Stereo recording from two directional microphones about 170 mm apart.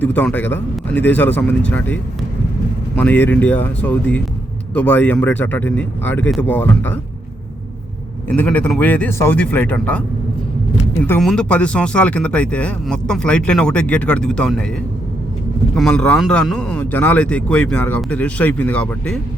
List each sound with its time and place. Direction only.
0.0 s speech: 10° left (ahead or behind)
8.3 s speech: 5° left (ahead or behind)
11.2 s speech: 5° left (ahead or behind)
15.7 s speech: 5° left (ahead or behind)